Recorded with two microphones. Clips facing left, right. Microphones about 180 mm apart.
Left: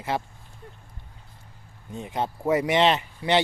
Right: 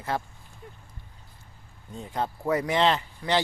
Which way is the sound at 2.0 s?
20° left (ahead or behind).